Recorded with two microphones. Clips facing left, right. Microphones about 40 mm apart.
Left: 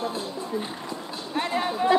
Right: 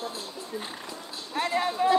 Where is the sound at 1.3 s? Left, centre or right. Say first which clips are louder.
Even; centre.